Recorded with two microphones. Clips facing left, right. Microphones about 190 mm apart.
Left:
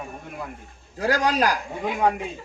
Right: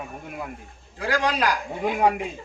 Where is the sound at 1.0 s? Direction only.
40° left (ahead or behind).